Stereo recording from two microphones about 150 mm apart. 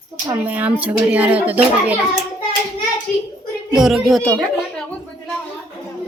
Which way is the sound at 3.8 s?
Centre (ahead or behind).